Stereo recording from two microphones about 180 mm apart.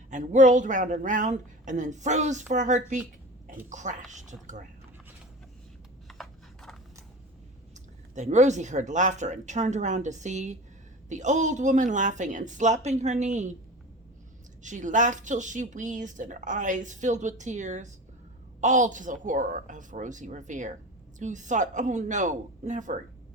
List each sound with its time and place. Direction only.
0.1 s speech: 45° right (ahead or behind)
6.1 s a sound: centre (ahead or behind)
8.1 s a woman's voice: 40° right (ahead or behind)
14.6 s speech: 45° right (ahead or behind)